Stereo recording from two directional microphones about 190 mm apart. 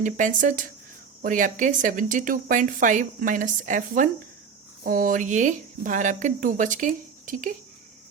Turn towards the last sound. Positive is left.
turn(degrees=-45)  # may be behind; listen again after turning